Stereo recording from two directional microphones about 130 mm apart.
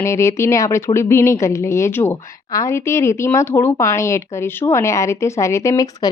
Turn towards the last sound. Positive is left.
turn(degrees=30)  # may be behind; listen again after turning